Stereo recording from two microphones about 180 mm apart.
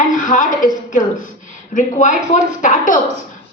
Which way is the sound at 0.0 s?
45° left (ahead or behind).